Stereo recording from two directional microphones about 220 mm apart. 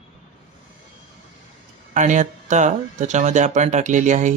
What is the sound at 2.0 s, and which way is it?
Speech, 35° right (ahead or behind).